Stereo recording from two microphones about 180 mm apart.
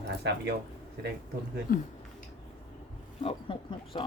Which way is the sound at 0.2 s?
70° right (ahead or behind).